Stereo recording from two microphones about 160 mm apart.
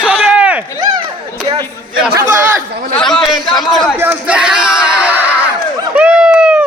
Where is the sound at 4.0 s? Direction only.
10° right (ahead or behind).